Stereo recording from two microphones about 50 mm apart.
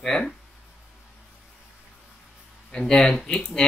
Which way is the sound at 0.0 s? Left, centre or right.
Centre.